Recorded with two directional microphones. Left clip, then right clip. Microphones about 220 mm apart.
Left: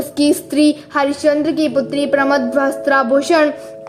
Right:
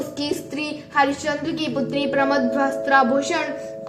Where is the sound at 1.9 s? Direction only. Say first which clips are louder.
Left 2 dB; 55° left (ahead or behind).